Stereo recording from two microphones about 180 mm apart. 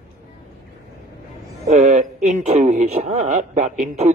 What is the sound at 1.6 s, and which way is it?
Speech, 40° right (ahead or behind).